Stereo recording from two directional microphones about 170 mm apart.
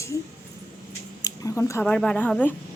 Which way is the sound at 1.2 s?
20° left (ahead or behind).